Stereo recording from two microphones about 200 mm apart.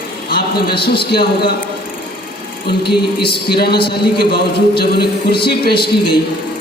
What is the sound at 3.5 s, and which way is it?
A man's voice, 50° left (ahead or behind).